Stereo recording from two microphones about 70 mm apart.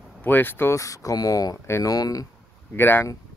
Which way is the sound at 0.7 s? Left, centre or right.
Left.